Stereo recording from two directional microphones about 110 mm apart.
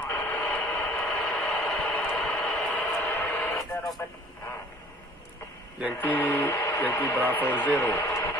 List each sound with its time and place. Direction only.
0.0 s radio: 15° left (ahead or behind)
5.9 s speech: 15° left (ahead or behind)